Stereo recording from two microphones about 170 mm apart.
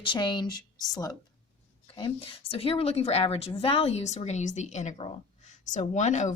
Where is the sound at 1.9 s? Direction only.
30° left (ahead or behind).